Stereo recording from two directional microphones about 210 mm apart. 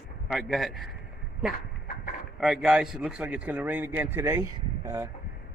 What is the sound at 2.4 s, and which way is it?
A man's voice, 5° right (ahead or behind).